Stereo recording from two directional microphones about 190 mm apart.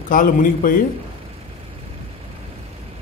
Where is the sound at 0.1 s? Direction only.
45° left (ahead or behind).